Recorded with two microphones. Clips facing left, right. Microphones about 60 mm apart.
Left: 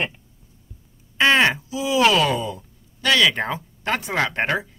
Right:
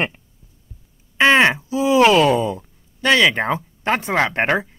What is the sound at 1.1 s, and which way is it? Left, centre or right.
Speech, centre.